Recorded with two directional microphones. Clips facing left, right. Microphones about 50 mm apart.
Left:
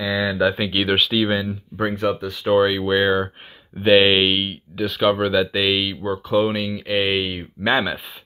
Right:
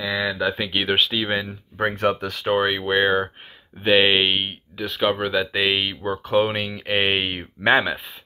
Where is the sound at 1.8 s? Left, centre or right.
Right.